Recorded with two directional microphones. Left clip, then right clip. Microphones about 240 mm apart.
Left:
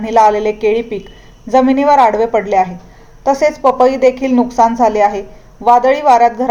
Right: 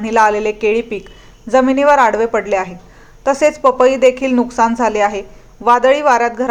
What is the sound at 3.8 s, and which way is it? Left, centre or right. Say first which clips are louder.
Speech: even; right.